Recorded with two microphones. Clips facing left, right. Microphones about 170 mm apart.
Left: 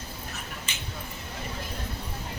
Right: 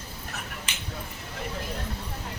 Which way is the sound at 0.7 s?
75° right (ahead or behind).